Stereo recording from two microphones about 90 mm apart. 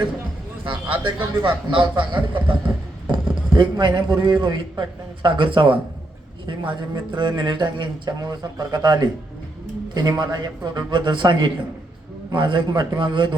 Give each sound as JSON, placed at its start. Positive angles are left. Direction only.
{"t": 0.6, "sound": "a man's voice", "side_deg": -65}
{"t": 2.5, "sound": "a sound", "side_deg": -60}
{"t": 3.5, "sound": "a man's voice", "side_deg": -55}
{"t": 6.5, "sound": "a man's voice", "side_deg": -60}